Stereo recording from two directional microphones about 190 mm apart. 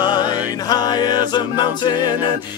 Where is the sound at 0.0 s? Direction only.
20° left (ahead or behind).